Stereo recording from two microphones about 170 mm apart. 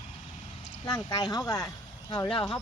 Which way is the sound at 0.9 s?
25° left (ahead or behind).